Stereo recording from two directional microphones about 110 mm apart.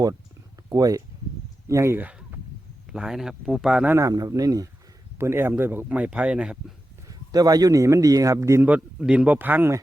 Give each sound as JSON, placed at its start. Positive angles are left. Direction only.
{"t": 0.7, "sound": "speech", "side_deg": -30}
{"t": 1.6, "sound": "a sound", "side_deg": -25}
{"t": 2.9, "sound": "speech", "side_deg": -5}
{"t": 3.9, "sound": "speech", "side_deg": -30}
{"t": 7.1, "sound": "speech", "side_deg": -35}
{"t": 8.6, "sound": "speech", "side_deg": -10}